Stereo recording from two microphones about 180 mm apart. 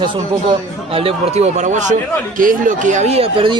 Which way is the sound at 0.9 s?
30° right (ahead or behind).